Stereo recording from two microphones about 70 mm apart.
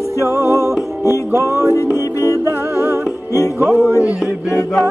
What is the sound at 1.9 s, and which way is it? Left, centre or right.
Music, left.